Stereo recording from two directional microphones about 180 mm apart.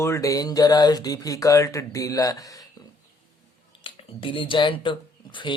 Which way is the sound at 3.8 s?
30° left (ahead or behind).